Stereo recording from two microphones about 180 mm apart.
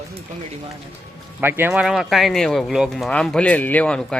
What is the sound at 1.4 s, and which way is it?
Speech, 10° right (ahead or behind).